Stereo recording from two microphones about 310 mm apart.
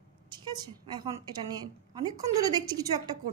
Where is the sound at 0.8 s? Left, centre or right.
Centre.